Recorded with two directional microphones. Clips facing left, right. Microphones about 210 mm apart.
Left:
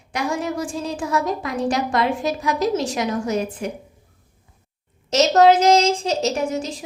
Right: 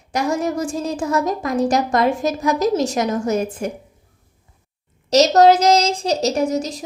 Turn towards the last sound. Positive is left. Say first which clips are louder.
# right 4 dB
turn(degrees=-40)  # may be behind; listen again after turning